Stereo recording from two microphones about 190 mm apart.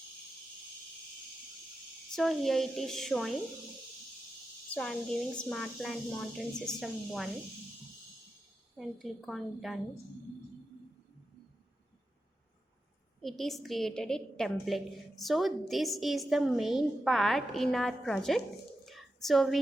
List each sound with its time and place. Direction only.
2.1 s a woman's voice: centre (ahead or behind)
4.7 s a woman's voice: 5° left (ahead or behind)
8.8 s a woman's voice: centre (ahead or behind)
13.2 s a woman's voice: centre (ahead or behind)
18.9 s a sound: centre (ahead or behind)